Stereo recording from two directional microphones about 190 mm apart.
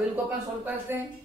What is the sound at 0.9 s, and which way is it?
Speech, 10° right (ahead or behind).